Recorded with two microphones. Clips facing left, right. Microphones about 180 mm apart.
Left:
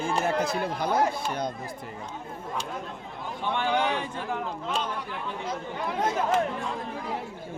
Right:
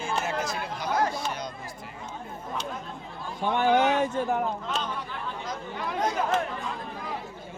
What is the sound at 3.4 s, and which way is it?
Speech, 45° right (ahead or behind).